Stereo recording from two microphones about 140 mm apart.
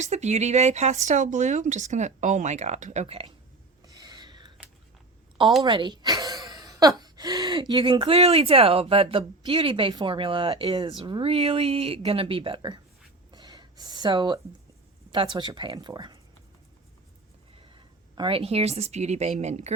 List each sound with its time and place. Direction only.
0.0 s speech: 55° right (ahead or behind)
3.8 s a sound: 25° right (ahead or behind)
5.6 s speech: 35° right (ahead or behind)
13.3 s gasp: 30° right (ahead or behind)
15.1 s speech: 35° right (ahead or behind)
17.7 s speech: 35° right (ahead or behind); by 19.7 s 50° right (ahead or behind)